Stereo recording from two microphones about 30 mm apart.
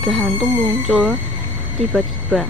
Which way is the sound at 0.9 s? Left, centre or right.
Left.